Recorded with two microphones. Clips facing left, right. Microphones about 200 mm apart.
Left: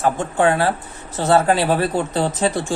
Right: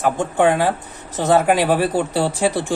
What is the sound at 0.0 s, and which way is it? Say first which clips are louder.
Speech: right 1 dB; 15° right (ahead or behind).